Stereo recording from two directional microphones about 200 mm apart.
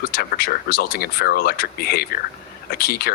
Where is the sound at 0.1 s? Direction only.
50° left (ahead or behind).